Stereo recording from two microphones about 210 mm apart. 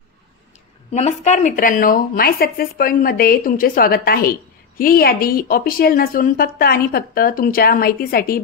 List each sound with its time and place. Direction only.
0.9 s speech: 35° left (ahead or behind)